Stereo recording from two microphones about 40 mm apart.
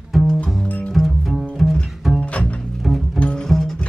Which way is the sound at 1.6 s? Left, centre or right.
Centre.